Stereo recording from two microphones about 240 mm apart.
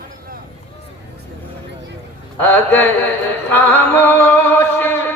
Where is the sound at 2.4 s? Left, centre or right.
Centre.